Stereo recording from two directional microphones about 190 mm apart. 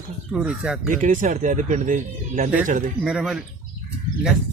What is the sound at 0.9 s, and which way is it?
Speech, 40° right (ahead or behind).